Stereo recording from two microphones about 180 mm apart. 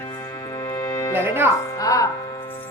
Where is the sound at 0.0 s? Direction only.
15° left (ahead or behind).